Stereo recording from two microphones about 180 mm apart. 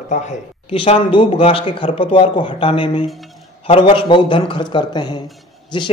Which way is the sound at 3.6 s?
30° left (ahead or behind).